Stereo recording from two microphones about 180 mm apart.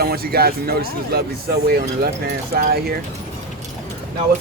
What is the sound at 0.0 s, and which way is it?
Speech, 60° right (ahead or behind).